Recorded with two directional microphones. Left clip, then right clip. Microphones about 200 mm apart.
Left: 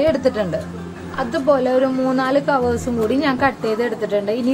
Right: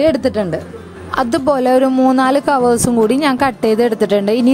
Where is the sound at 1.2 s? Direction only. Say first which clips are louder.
Right 3 dB; 65° right (ahead or behind).